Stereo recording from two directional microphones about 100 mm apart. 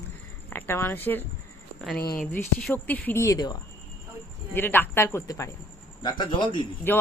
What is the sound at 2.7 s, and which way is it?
Speech, 15° left (ahead or behind).